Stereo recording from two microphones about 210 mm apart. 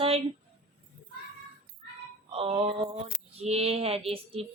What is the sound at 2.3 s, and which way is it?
A woman's voice, 25° right (ahead or behind).